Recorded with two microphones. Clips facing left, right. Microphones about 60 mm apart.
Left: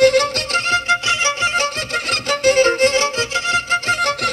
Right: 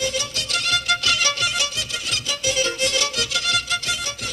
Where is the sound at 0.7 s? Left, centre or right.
Left.